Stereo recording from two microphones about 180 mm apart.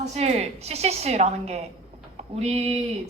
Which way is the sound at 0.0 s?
35° right (ahead or behind).